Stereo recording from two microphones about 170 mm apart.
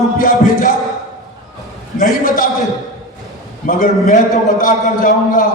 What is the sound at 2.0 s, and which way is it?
Speech, 55° left (ahead or behind).